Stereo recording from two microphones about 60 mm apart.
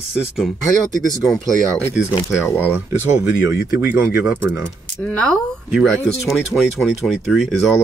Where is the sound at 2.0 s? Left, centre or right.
Centre.